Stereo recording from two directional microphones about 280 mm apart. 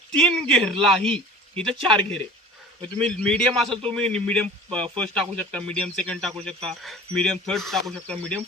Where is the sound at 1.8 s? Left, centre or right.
Centre.